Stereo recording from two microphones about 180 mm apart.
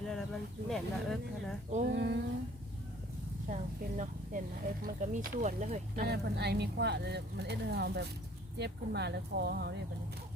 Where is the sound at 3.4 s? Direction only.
45° right (ahead or behind).